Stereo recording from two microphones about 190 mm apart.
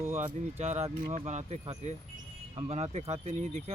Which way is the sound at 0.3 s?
35° right (ahead or behind).